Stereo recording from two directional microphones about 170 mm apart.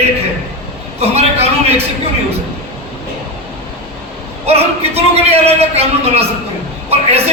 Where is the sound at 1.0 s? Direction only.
40° right (ahead or behind).